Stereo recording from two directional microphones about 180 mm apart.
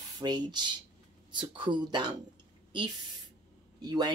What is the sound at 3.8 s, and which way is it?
Speech, 25° right (ahead or behind).